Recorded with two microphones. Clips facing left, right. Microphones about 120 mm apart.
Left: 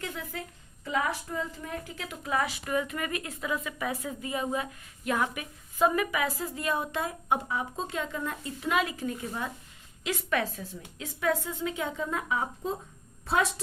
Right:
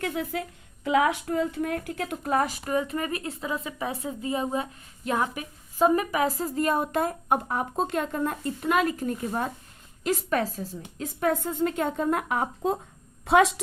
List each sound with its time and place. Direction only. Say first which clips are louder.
0.0 s a woman's voice: right 8 dB; 60° right (ahead or behind)
0.9 s a woman's voice: right 7 dB; 75° right (ahead or behind)